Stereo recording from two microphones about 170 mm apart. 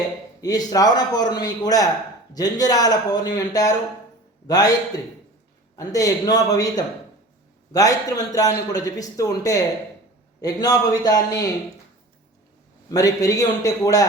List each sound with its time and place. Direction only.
0.4 s a man's voice: 20° left (ahead or behind)
5.7 s a man's voice: 20° left (ahead or behind)
12.9 s a man's voice: 20° left (ahead or behind)